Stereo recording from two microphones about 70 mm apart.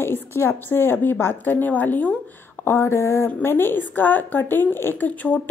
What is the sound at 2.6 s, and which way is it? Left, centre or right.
A woman's voice, left.